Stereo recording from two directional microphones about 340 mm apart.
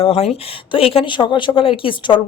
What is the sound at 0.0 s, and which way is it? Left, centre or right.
Speech, centre.